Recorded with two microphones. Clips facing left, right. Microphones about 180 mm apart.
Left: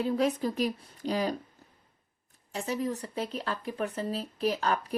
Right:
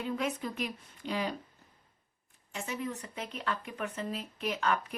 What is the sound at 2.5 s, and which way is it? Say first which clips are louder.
Speech: left 6 dB; 35° left (ahead or behind).